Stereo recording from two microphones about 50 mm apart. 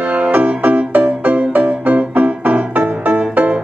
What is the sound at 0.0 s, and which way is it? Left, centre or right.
Music, right.